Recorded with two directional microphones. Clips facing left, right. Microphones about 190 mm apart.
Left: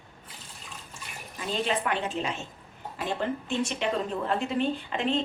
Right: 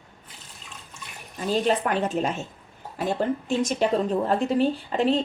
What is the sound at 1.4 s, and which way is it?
Speech, 40° right (ahead or behind).